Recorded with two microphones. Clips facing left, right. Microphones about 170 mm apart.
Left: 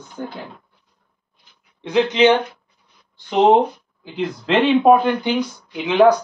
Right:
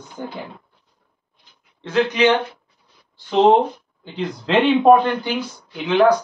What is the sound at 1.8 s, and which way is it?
Speech, 20° left (ahead or behind).